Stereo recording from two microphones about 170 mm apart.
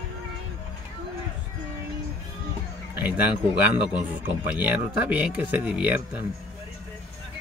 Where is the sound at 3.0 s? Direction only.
10° right (ahead or behind).